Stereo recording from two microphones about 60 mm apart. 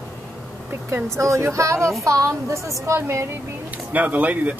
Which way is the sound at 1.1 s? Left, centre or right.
Right.